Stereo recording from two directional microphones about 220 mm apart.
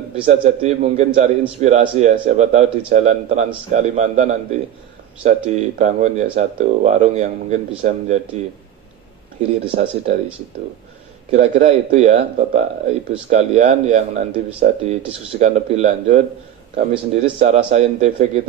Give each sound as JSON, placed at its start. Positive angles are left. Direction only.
{"t": 0.1, "sound": "a man's voice", "side_deg": -30}
{"t": 9.7, "sound": "a man's voice", "side_deg": -30}
{"t": 11.3, "sound": "a man's voice", "side_deg": -30}